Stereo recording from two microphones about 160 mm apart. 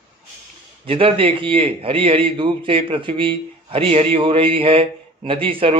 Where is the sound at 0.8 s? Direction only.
35° right (ahead or behind).